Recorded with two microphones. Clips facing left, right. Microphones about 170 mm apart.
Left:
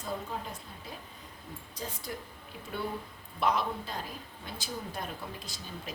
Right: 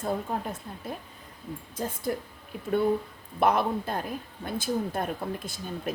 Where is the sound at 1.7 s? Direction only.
50° right (ahead or behind).